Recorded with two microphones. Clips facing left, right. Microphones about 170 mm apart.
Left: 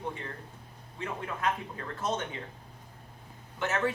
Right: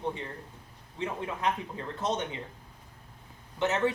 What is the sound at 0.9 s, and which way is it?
Speech, 20° right (ahead or behind).